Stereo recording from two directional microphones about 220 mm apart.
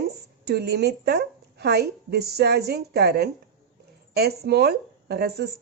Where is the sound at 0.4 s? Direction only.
50° right (ahead or behind).